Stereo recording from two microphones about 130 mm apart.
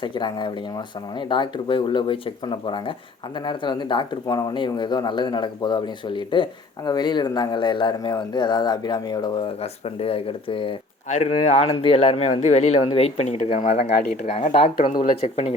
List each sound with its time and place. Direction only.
0.0 s speech: 35° left (ahead or behind)
9.6 s speech: 50° left (ahead or behind)
11.1 s speech: 55° left (ahead or behind)
12.8 s speech: 45° left (ahead or behind)